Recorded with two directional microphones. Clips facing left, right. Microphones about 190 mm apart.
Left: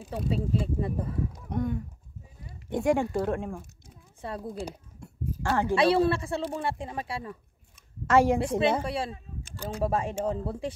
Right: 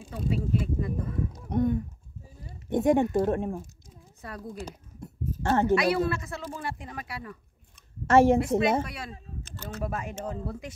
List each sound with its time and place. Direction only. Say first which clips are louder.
0.1 s speech: even; 30° left (ahead or behind)
1.3 s a sound: right 9 dB; 20° right (ahead or behind)
2.4 s speech: right 2 dB; 20° right (ahead or behind)
4.2 s speech: left 4 dB; 30° left (ahead or behind)
5.0 s a sound: right 2 dB; 20° right (ahead or behind)
5.8 s speech: left 3 dB; 30° left (ahead or behind)
8.1 s a woman's voice: right 3 dB; 25° right (ahead or behind)
8.8 s speech: left 9 dB; 30° left (ahead or behind)
9.4 s a sound: left 5 dB; 10° left (ahead or behind)
9.8 s speech: left 7 dB; 30° left (ahead or behind)